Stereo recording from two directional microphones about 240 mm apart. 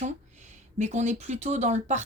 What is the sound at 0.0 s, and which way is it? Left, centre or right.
Speech, right.